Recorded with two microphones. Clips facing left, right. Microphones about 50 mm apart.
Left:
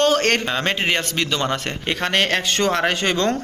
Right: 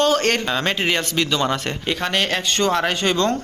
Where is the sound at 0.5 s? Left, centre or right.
Left.